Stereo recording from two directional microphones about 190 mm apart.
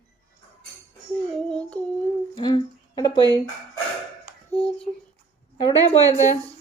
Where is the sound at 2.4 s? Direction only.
25° left (ahead or behind).